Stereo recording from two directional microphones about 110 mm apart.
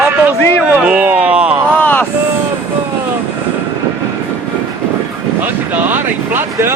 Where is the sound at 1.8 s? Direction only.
15° left (ahead or behind).